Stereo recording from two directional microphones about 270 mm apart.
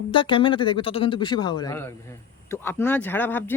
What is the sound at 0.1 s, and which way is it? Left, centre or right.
Speech, centre.